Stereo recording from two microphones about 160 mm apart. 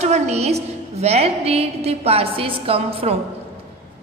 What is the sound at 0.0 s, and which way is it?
A woman's voice, 40° right (ahead or behind).